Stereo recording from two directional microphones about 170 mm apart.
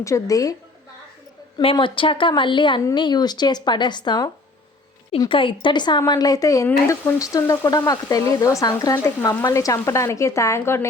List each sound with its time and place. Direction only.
0.0 s speech: 20° left (ahead or behind)
1.5 s speech: 25° left (ahead or behind)